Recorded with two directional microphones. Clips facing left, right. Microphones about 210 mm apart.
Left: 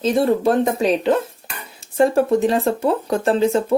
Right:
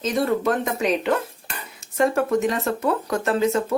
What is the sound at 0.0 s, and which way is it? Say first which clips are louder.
Speech: left 5 dB; 30° left (ahead or behind).